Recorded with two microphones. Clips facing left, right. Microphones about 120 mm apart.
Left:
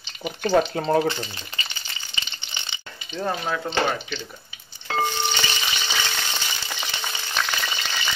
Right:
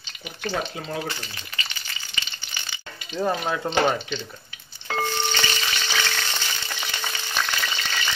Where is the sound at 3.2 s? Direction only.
15° right (ahead or behind).